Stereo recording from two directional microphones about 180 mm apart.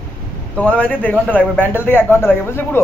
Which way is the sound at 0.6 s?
5° left (ahead or behind).